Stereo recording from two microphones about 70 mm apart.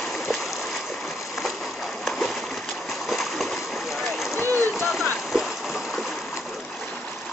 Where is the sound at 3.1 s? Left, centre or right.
Centre.